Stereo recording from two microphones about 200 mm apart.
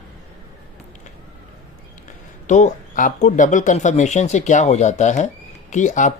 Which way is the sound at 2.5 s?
35° left (ahead or behind).